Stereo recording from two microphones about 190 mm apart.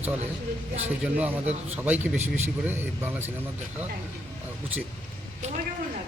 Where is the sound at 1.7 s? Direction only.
10° right (ahead or behind).